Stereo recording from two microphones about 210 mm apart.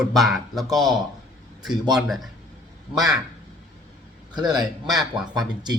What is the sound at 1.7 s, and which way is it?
Speech, 20° right (ahead or behind).